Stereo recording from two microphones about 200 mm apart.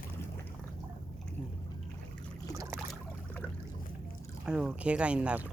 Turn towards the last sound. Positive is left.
turn(degrees=-5)  # may be behind; listen again after turning